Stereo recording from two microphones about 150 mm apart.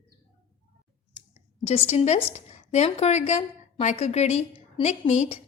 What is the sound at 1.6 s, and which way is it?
A woman's voice, 45° left (ahead or behind).